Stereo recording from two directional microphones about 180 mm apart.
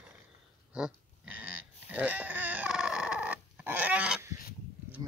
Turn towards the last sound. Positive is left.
turn(degrees=-10)  # may be behind; listen again after turning